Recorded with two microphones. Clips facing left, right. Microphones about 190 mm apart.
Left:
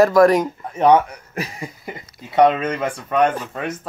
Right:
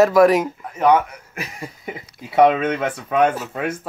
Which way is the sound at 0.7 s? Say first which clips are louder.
Left 2 dB; 30° left (ahead or behind).